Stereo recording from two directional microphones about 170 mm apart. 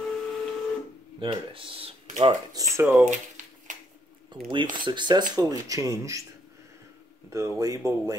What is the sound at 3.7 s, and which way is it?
Finger snapping, 50° right (ahead or behind).